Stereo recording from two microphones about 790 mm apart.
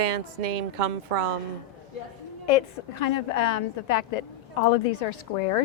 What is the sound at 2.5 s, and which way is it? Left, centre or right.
A woman's voice, left.